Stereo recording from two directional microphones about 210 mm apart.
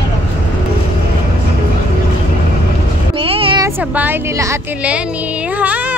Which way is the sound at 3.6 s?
10° right (ahead or behind).